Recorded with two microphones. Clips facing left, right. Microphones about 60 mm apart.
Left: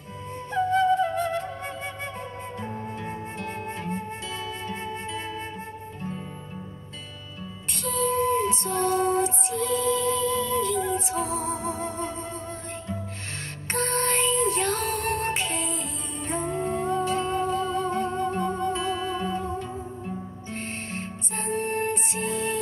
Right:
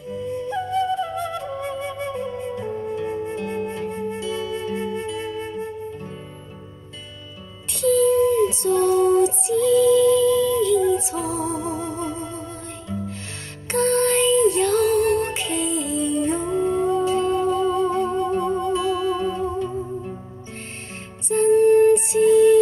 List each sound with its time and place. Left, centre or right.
0.1 s music: left
7.8 s music: left
13.7 s music: left
20.9 s music: left